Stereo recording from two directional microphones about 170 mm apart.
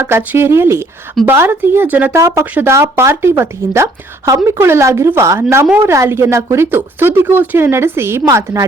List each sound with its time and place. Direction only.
0.0 s a woman's voice: 10° right (ahead or behind)